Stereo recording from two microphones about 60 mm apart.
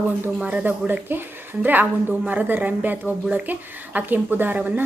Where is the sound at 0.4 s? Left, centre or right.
Right.